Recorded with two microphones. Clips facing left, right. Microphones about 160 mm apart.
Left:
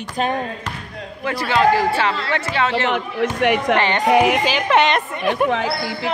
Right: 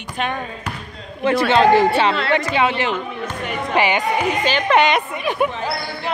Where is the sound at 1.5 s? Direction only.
20° right (ahead or behind).